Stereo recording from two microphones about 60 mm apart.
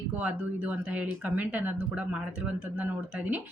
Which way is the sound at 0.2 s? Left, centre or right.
Right.